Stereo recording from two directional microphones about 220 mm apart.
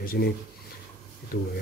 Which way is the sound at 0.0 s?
45° left (ahead or behind).